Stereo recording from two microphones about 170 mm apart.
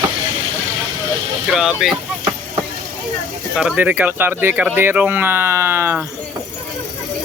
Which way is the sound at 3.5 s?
5° right (ahead or behind).